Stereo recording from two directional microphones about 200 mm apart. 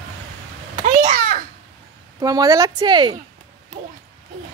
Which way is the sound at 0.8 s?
35° right (ahead or behind).